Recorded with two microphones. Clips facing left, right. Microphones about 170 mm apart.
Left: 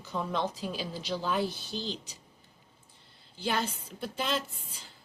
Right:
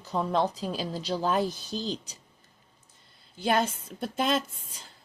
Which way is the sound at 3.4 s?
45° right (ahead or behind).